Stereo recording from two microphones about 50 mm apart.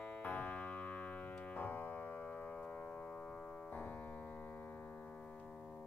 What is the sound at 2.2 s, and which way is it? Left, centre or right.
Civil defense siren, left.